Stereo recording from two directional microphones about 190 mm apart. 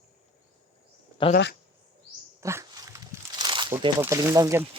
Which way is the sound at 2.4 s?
15° right (ahead or behind).